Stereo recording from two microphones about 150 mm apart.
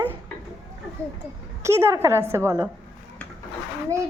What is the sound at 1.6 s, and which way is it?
Speech, 20° right (ahead or behind).